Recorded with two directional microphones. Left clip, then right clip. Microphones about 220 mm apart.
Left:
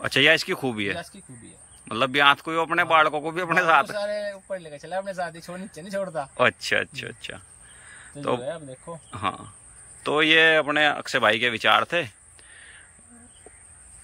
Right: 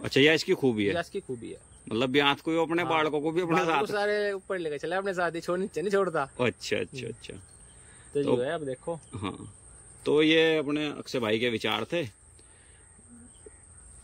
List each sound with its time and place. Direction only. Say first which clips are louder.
0.0 s a man's voice: left 4 dB; 5° right (ahead or behind)
4.0 s a man's voice: right 1 dB; 25° right (ahead or behind)
5.5 s a man's voice: right 8 dB; 10° right (ahead or behind)
5.8 s a man's voice: right 1 dB; 25° right (ahead or behind)
6.6 s speech: left 6 dB; 5° right (ahead or behind)
8.5 s a man's voice: right 1 dB; 25° right (ahead or behind)
9.1 s speech: left 9 dB; 5° right (ahead or behind)